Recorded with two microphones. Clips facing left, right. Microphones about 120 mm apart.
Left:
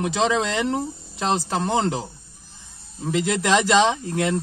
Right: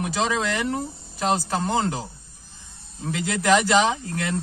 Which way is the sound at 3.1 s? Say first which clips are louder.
Even; 25° left (ahead or behind).